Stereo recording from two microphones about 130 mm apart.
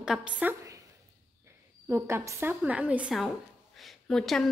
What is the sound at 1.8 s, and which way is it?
A woman's voice, 20° right (ahead or behind).